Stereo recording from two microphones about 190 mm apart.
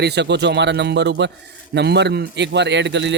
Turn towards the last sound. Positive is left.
turn(degrees=-70)  # may be behind; listen again after turning